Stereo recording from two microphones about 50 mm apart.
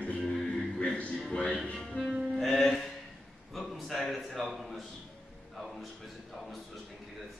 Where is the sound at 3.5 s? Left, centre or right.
Centre.